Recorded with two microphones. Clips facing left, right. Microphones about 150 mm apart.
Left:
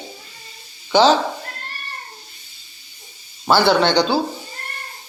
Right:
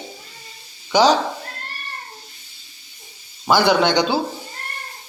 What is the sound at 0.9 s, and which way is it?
Speech, 10° right (ahead or behind).